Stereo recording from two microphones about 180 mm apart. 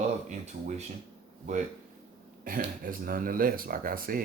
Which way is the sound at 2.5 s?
50° right (ahead or behind).